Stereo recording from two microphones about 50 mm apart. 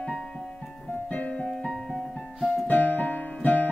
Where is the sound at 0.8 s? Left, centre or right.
Left.